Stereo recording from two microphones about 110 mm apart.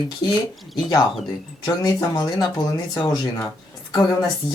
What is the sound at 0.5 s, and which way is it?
Speech, centre (ahead or behind).